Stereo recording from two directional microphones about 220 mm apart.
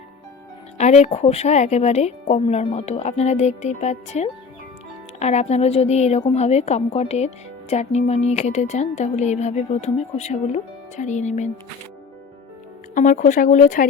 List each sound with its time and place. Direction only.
0.8 s a woman's voice: 30° left (ahead or behind)
12.9 s a woman's voice: 35° left (ahead or behind)